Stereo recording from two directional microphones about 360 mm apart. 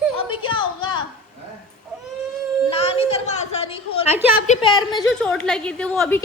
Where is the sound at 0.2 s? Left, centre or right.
Centre.